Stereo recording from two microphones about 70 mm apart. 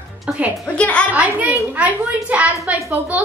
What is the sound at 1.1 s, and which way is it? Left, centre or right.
A woman's voice, right.